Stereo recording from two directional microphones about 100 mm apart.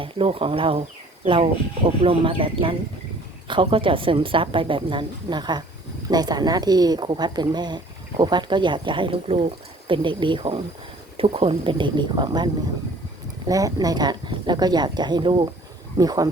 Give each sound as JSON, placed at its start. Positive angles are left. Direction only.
{"t": 0.0, "sound": "speech", "side_deg": -65}
{"t": 2.0, "sound": "a woman's voice", "side_deg": -65}
{"t": 13.5, "sound": "speech", "side_deg": -35}
{"t": 16.0, "sound": "speech", "side_deg": -40}